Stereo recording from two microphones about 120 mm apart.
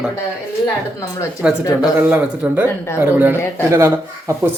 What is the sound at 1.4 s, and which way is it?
Speech, 10° right (ahead or behind).